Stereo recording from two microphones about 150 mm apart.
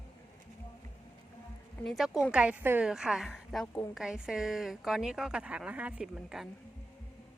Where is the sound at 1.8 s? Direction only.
Centre (ahead or behind).